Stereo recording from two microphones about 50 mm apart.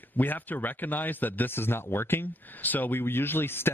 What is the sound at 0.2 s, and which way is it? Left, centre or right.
Speech, left.